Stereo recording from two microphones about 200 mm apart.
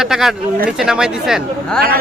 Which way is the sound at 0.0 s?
Centre (ahead or behind).